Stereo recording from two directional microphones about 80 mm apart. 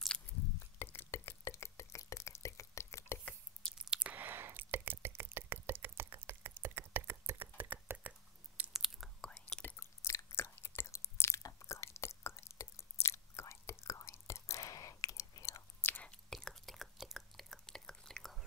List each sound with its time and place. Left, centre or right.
0.3 s biting: centre
0.7 s drip: left
3.7 s chewing: centre
4.1 s a sound: right
8.7 s whispering: centre
9.2 s whispering: centre
9.8 s chewing: left
11.6 s whispering: left
15.8 s whispering: left
16.1 s whispering: centre